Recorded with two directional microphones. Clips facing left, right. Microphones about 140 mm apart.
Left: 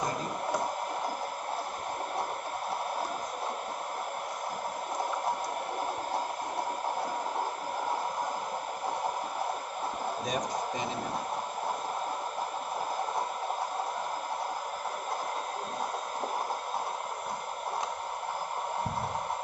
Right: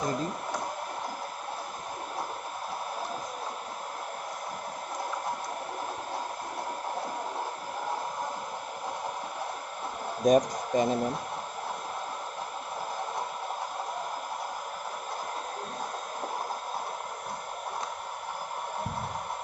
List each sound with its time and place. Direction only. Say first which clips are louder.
10.2 s speech: right 13 dB; 45° right (ahead or behind)